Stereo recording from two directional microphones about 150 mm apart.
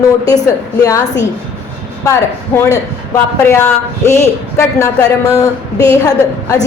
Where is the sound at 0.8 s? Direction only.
20° left (ahead or behind).